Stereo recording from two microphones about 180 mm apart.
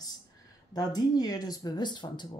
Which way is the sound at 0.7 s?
20° left (ahead or behind).